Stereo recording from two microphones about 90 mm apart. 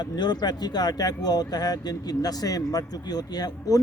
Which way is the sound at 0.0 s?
50° left (ahead or behind).